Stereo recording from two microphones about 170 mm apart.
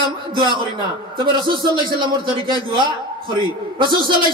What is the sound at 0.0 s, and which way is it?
A man's voice, 25° right (ahead or behind).